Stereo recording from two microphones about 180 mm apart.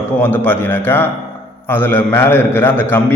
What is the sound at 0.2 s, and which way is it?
A man's voice, 10° left (ahead or behind).